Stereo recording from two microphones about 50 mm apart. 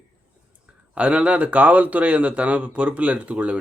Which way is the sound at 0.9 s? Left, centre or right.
Right.